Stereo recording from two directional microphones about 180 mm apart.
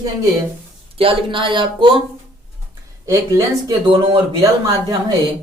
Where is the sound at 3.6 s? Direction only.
25° right (ahead or behind).